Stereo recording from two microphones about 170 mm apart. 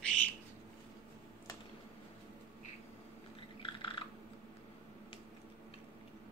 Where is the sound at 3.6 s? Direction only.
30° left (ahead or behind).